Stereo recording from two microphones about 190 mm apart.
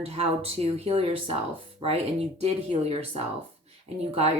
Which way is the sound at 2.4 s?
30° right (ahead or behind).